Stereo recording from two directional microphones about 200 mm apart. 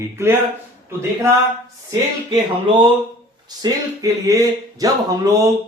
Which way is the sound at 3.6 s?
15° right (ahead or behind).